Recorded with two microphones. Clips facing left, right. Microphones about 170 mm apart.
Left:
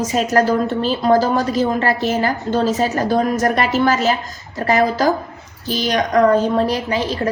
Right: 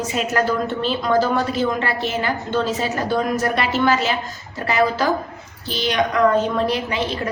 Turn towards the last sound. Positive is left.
turn(degrees=40)  # may be behind; listen again after turning